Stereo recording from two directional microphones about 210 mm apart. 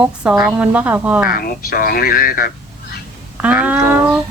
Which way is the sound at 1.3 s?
45° left (ahead or behind).